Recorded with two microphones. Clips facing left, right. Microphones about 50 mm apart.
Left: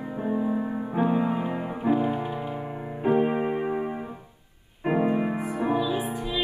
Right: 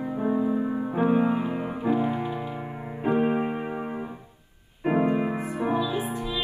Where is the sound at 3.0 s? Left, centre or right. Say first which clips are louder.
Left 1 dB; centre.